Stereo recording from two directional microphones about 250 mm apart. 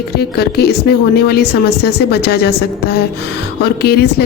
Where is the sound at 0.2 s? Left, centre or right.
Left.